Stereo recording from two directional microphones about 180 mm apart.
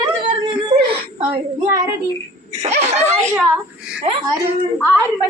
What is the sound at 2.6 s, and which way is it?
Speech, 35° right (ahead or behind).